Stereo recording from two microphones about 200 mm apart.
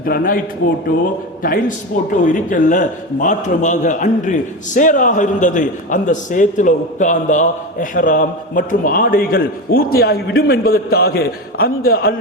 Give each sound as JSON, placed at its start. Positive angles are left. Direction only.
{"t": 0.0, "sound": "a man's voice", "side_deg": 45}